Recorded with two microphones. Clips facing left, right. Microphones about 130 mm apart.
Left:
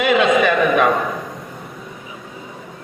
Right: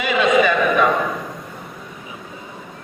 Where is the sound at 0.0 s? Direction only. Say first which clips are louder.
Left 2 dB; 55° left (ahead or behind).